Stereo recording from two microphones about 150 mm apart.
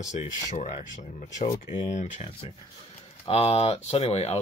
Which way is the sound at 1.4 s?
50° left (ahead or behind).